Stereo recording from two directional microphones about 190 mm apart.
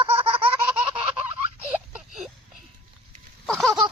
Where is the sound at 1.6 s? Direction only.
5° right (ahead or behind).